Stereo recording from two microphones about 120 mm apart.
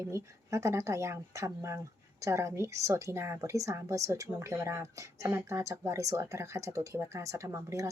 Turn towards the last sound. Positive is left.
turn(degrees=-25)  # may be behind; listen again after turning